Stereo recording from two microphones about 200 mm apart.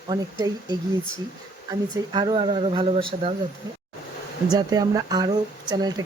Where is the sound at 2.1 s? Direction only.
20° right (ahead or behind).